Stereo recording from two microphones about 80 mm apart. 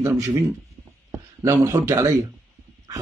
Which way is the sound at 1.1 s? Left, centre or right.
Right.